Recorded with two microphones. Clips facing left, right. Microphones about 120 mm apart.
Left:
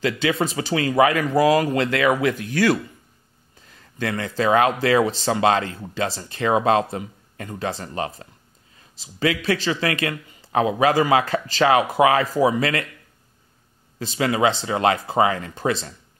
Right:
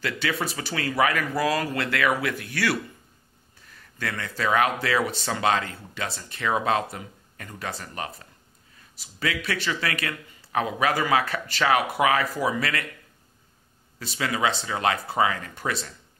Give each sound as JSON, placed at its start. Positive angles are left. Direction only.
{"t": 0.0, "sound": "a man's voice", "side_deg": 20}
{"t": 14.1, "sound": "speech", "side_deg": 30}